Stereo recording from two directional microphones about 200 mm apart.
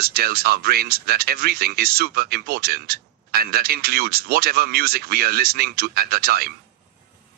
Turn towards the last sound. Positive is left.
turn(degrees=-50)  # may be behind; listen again after turning